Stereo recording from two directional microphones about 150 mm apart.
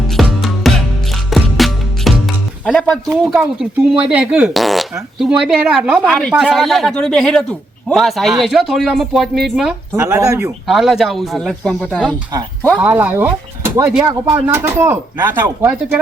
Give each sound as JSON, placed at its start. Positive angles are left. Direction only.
{"t": 0.1, "sound": "music", "side_deg": 0}
{"t": 3.6, "sound": "a woman's voice", "side_deg": -5}
{"t": 9.9, "sound": "speech", "side_deg": -20}
{"t": 10.7, "sound": "a woman's voice", "side_deg": 0}
{"t": 12.7, "sound": "speech", "side_deg": -10}
{"t": 14.3, "sound": "speech", "side_deg": -15}